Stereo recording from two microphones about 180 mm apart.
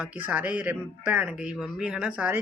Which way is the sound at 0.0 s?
10° right (ahead or behind).